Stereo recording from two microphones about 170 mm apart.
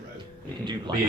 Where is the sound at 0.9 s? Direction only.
25° right (ahead or behind).